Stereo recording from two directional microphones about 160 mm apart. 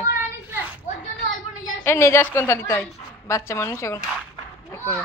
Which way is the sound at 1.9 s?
15° left (ahead or behind).